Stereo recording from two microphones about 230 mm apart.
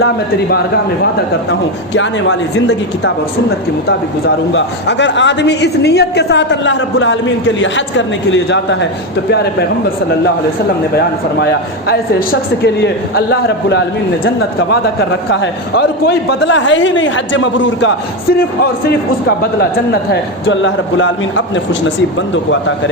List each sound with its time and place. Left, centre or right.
2.0 s a woman's voice: left
4.5 s a woman's voice: left
10.9 s a woman's voice: left
15.3 s a woman's voice: left